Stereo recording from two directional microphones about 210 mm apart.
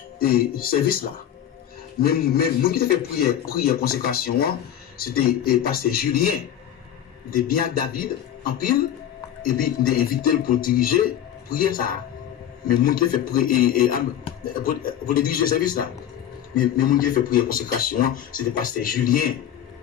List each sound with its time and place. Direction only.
0.2 s a man's voice: 45° left (ahead or behind)